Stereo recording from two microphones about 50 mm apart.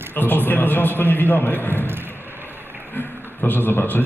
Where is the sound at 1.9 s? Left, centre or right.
Right.